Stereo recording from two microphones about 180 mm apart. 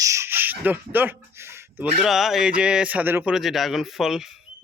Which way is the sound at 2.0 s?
Centre (ahead or behind).